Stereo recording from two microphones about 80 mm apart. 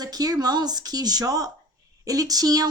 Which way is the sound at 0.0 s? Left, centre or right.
Right.